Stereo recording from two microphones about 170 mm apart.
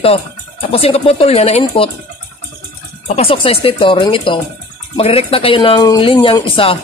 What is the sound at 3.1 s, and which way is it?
Speech, 35° left (ahead or behind).